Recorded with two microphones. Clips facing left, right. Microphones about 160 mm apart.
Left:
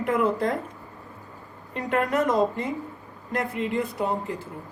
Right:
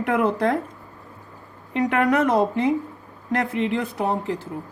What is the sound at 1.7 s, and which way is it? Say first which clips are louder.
A woman's voice: right 5 dB; 75° right (ahead or behind).